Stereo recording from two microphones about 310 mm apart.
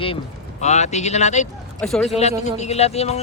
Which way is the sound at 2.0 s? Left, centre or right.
Centre.